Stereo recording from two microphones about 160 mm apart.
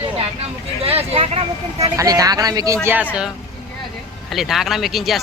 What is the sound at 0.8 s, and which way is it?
Speech, 40° right (ahead or behind).